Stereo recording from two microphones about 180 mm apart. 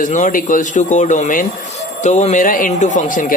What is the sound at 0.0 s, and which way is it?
A man's voice, 45° left (ahead or behind).